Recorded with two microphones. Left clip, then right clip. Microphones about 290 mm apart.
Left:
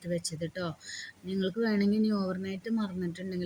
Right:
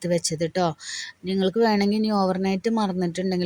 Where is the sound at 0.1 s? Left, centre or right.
Right.